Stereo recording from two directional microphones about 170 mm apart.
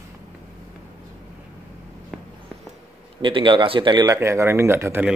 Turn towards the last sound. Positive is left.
turn(degrees=-10)  # may be behind; listen again after turning